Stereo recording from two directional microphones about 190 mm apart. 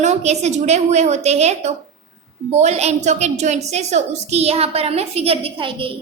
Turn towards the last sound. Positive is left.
turn(degrees=-25)  # may be behind; listen again after turning